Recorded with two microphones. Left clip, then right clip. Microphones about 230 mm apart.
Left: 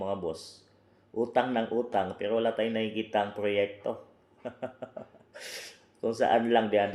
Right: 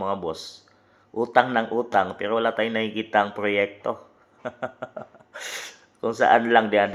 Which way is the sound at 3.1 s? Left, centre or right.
Right.